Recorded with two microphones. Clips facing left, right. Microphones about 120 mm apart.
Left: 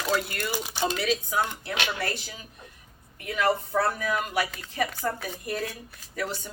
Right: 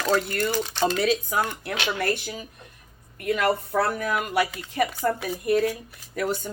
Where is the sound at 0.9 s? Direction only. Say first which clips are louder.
Right 3 dB; 45° right (ahead or behind).